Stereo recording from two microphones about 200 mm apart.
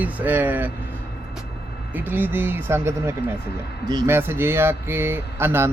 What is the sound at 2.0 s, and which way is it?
Speech, 10° right (ahead or behind).